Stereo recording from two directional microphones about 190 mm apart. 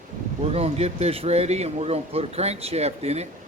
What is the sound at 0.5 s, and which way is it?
Speech, 35° right (ahead or behind).